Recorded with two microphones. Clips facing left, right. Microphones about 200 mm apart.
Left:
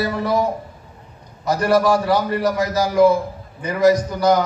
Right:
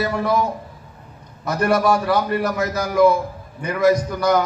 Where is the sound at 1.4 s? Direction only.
55° right (ahead or behind).